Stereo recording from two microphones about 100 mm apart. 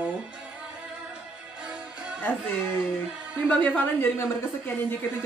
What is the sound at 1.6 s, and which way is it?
Music, 10° right (ahead or behind).